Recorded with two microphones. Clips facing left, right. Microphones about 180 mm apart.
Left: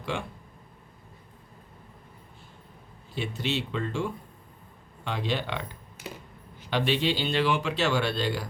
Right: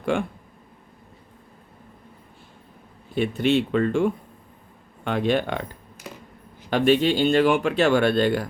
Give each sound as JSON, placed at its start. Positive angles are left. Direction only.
{"t": 0.0, "sound": "speech", "side_deg": -50}
{"t": 3.2, "sound": "speech", "side_deg": -55}
{"t": 6.7, "sound": "speech", "side_deg": -50}